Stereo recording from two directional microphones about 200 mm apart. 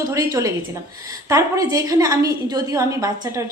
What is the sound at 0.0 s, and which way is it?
Speech, 15° right (ahead or behind).